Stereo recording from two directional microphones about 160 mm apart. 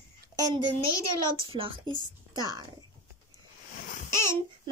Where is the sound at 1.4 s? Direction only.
35° right (ahead or behind).